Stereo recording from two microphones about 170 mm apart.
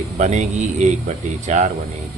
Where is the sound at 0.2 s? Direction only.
45° right (ahead or behind).